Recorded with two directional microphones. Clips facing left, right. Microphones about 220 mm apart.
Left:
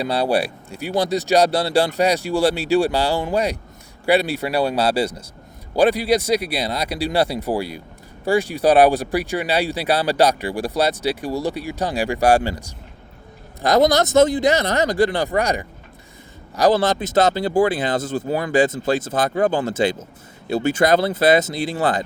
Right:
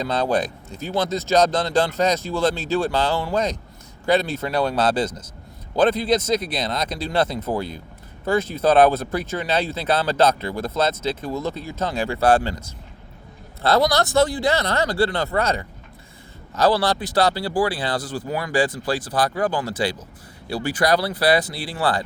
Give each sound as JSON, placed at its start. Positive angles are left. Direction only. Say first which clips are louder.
{"t": 0.0, "sound": "speech", "louder": "left 2 dB", "side_deg": 10}